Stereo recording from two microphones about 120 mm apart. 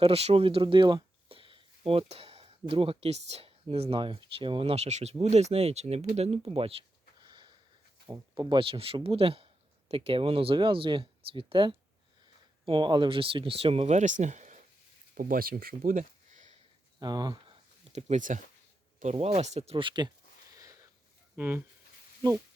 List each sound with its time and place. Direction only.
0.0 s speech: 55° right (ahead or behind)
7.3 s sniff: 40° right (ahead or behind)
8.4 s speech: 45° right (ahead or behind); by 14.6 s 90° right
16.0 s a sound: 90° right
17.0 s speech: 35° right (ahead or behind)
17.9 s speech: 80° right
19.0 s speech: 60° right (ahead or behind)
19.8 s speech: 40° right (ahead or behind)
21.3 s speech: 15° right (ahead or behind)